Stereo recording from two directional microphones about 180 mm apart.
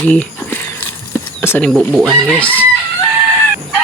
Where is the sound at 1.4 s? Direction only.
10° left (ahead or behind).